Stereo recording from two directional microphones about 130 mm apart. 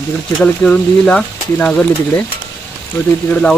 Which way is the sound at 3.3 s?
10° left (ahead or behind).